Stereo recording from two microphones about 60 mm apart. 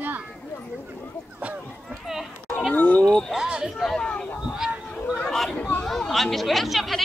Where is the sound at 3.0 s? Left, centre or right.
Centre.